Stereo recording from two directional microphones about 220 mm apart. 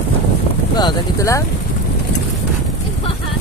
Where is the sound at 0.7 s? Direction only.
15° left (ahead or behind).